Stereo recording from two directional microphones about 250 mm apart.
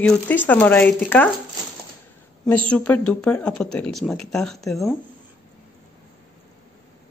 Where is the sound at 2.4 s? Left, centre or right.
Centre.